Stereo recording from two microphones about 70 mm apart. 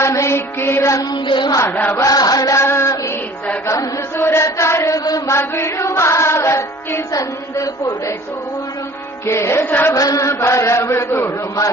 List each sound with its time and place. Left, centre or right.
0.0 s music: left
1.1 s a sound: left
1.6 s chant: left
2.0 s chant: left
2.6 s music: left
4.2 s chant: left
5.3 s music: left
7.1 s chant: left
9.2 s music: left
9.6 s chant: left
9.9 s chant: left